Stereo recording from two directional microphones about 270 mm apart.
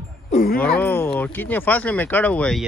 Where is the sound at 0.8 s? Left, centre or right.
Centre.